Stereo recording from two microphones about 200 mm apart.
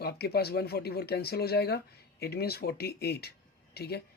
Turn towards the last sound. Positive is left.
turn(degrees=50)  # may be behind; listen again after turning